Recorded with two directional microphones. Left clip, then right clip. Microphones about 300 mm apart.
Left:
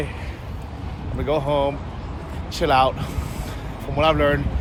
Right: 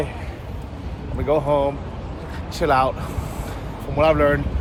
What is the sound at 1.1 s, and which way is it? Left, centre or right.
Speech, centre.